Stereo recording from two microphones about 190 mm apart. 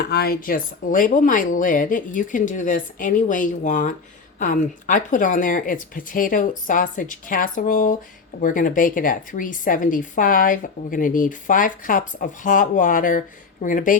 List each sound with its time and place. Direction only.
0.1 s a woman's voice: 50° left (ahead or behind)